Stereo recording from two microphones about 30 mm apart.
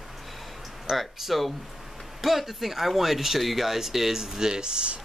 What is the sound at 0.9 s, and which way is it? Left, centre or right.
Speech, centre.